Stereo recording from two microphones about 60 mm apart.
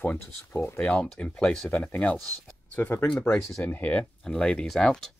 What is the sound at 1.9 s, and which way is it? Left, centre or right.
Speech, left.